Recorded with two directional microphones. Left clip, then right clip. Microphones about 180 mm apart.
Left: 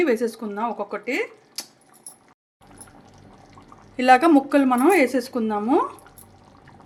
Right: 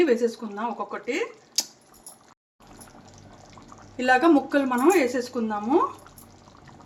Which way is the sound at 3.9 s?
65° left (ahead or behind).